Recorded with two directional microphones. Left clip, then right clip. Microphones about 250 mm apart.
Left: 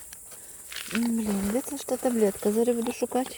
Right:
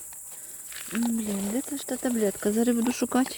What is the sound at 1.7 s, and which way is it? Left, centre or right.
Speech, centre.